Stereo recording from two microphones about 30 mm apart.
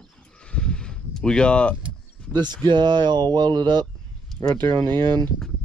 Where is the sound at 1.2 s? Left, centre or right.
Left.